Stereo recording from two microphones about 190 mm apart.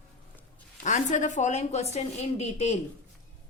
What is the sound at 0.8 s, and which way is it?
A woman's voice, 40° left (ahead or behind).